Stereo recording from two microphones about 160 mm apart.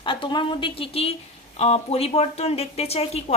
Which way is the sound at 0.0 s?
30° left (ahead or behind).